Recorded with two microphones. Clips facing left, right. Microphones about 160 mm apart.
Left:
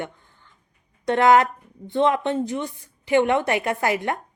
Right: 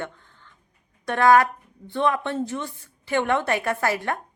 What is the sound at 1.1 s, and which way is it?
Speech, 20° left (ahead or behind).